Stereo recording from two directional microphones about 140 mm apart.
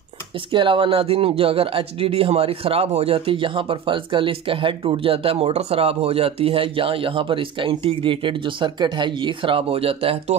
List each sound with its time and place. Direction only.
0.5 s speech: 35° right (ahead or behind)